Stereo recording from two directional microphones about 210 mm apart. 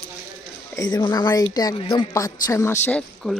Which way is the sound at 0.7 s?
20° left (ahead or behind).